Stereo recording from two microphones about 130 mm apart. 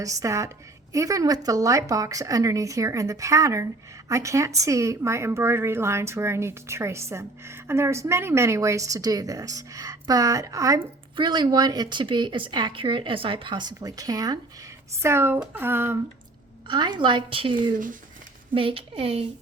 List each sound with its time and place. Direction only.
0.0 s speech: 25° right (ahead or behind)
15.0 s speech: 20° right (ahead or behind)
16.6 s speech: 35° right (ahead or behind)